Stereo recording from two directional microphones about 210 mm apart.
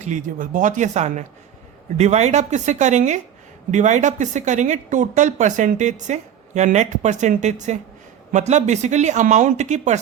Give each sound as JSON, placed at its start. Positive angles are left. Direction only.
{"t": 0.0, "sound": "speech", "side_deg": -35}